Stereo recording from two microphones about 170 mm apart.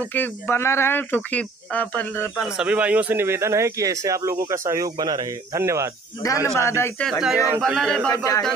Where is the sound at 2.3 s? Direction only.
5° right (ahead or behind).